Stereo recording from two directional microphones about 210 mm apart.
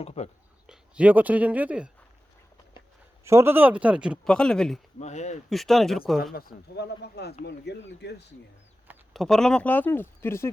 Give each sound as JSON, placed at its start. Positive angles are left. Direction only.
{"t": 0.0, "sound": "speech", "side_deg": 30}
{"t": 0.7, "sound": "speech", "side_deg": -5}
{"t": 3.2, "sound": "speech", "side_deg": -10}
{"t": 4.9, "sound": "speech", "side_deg": 35}
{"t": 5.5, "sound": "speech", "side_deg": 0}
{"t": 6.3, "sound": "speech", "side_deg": 50}
{"t": 9.1, "sound": "speech", "side_deg": 0}